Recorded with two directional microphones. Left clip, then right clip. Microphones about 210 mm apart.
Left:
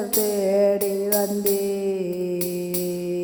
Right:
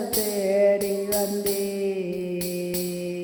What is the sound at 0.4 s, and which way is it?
Music, 40° left (ahead or behind).